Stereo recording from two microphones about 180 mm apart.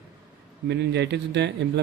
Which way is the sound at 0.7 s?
75° right (ahead or behind).